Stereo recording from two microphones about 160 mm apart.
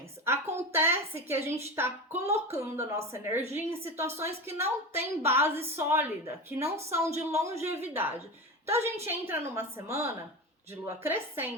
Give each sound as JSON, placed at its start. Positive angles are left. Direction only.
{"t": 0.3, "sound": "a woman's voice", "side_deg": -15}